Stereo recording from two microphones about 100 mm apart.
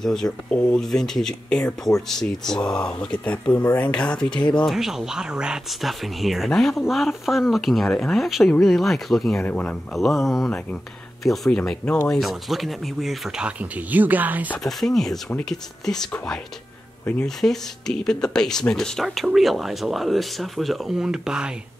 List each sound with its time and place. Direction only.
0.0 s speech: 5° left (ahead or behind)
4.7 s speech: 5° right (ahead or behind)
9.4 s speech: 15° left (ahead or behind)
9.9 s speech: centre (ahead or behind)
13.5 s speech: 15° right (ahead or behind)
14.6 s speech: centre (ahead or behind)
17.4 s speech: 5° left (ahead or behind)